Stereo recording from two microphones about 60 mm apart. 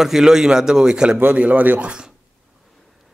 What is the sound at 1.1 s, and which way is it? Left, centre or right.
Speech, right.